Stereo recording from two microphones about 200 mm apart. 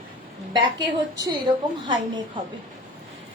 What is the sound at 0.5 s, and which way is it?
Speech, 20° right (ahead or behind).